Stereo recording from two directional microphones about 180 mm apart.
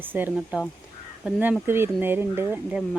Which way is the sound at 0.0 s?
10° right (ahead or behind).